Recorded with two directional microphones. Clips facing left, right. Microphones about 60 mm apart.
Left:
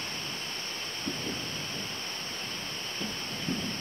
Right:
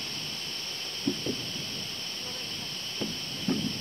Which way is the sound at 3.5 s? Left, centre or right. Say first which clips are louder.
Right 5 dB; centre.